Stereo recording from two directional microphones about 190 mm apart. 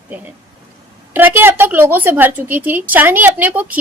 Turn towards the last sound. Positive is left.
turn(degrees=-10)  # may be behind; listen again after turning